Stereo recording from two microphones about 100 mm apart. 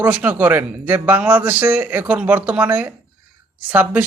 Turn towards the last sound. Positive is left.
turn(degrees=-15)  # may be behind; listen again after turning